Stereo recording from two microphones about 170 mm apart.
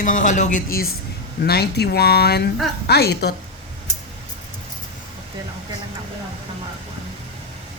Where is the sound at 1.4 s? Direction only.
70° left (ahead or behind).